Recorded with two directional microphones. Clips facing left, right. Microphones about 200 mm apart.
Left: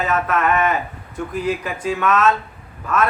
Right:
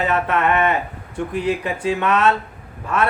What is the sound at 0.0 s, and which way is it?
Speech, 30° right (ahead or behind).